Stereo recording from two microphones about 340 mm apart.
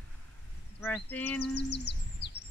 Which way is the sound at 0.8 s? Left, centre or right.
Centre.